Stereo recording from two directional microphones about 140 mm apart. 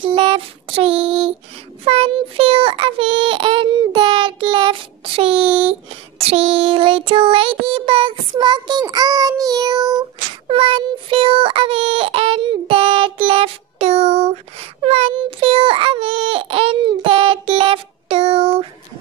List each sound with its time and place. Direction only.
0.1 s child singing: 40° right (ahead or behind)
10.5 s child singing: 40° right (ahead or behind)